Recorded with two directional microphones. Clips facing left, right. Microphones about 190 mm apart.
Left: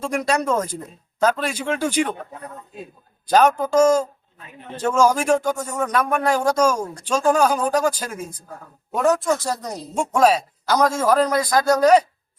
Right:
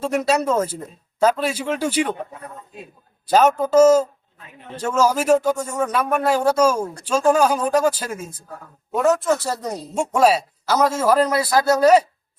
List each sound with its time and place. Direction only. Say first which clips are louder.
0.0 s speech: right 2 dB; 5° right (ahead or behind)
3.2 s speech: even; 5° right (ahead or behind)